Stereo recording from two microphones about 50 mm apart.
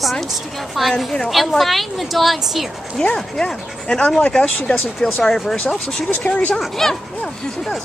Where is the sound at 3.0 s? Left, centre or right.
Centre.